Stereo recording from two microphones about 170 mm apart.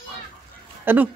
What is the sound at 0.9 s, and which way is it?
Speech, 10° right (ahead or behind).